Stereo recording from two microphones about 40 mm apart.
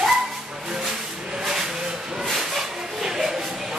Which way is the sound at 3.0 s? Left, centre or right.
Centre.